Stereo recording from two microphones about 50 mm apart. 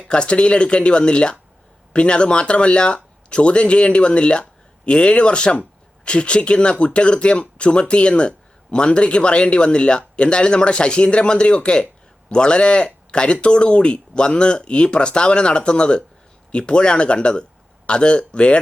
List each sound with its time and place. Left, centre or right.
0.1 s speech: left